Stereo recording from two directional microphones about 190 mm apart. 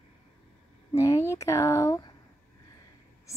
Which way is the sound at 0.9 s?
15° left (ahead or behind).